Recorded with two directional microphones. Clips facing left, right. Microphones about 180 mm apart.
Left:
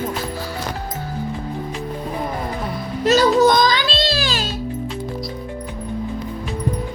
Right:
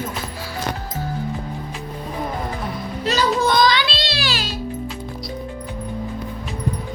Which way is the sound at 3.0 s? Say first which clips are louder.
Left 6 dB; 45° left (ahead or behind).